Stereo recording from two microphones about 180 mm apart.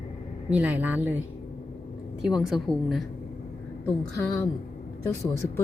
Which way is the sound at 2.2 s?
5° right (ahead or behind).